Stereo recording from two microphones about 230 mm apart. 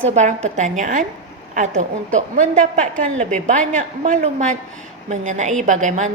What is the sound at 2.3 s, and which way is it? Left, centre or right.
A woman's voice, right.